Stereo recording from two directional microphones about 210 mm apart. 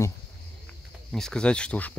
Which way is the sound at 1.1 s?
5° left (ahead or behind).